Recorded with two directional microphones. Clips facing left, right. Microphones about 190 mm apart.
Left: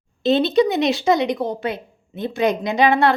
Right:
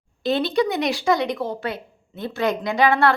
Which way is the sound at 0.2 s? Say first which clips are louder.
Left 4 dB; 20° left (ahead or behind).